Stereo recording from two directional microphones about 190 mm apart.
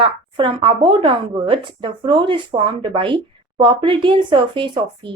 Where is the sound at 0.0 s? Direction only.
25° right (ahead or behind).